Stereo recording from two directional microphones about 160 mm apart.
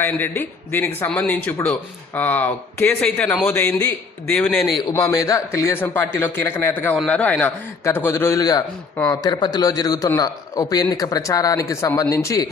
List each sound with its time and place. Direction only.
0.0 s a man's voice: 15° left (ahead or behind)